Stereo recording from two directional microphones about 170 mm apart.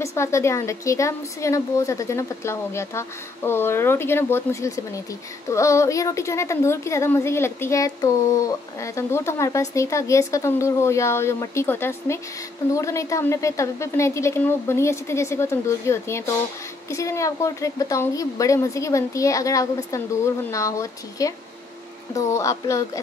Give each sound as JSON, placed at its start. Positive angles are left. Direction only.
{"t": 0.0, "sound": "a woman's voice", "side_deg": 15}